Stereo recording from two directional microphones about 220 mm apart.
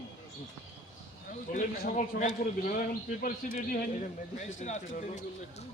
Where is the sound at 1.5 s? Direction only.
35° left (ahead or behind).